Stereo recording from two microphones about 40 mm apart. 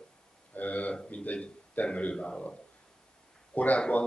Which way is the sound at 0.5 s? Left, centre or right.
Left.